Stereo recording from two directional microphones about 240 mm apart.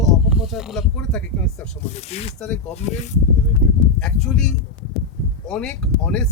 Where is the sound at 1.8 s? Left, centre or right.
Left.